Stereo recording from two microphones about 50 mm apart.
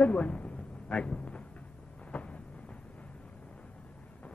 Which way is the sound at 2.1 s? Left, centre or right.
Left.